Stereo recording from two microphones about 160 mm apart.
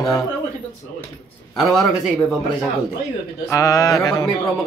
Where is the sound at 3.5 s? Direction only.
20° left (ahead or behind).